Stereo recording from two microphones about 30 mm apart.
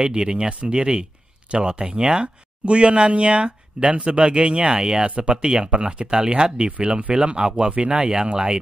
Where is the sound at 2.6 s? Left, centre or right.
Right.